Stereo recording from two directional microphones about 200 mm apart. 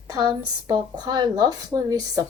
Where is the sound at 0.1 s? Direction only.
15° right (ahead or behind).